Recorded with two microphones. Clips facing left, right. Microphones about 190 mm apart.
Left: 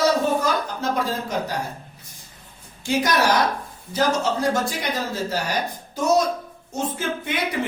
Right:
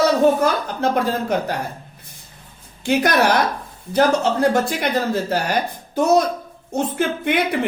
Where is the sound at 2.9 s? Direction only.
60° right (ahead or behind).